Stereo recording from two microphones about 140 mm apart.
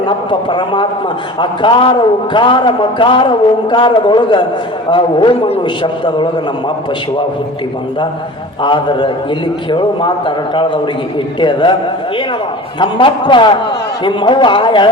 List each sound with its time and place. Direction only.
0.0 s a man's voice: 35° left (ahead or behind)
8.6 s a man's voice: 35° left (ahead or behind)
12.8 s a man's voice: 35° left (ahead or behind)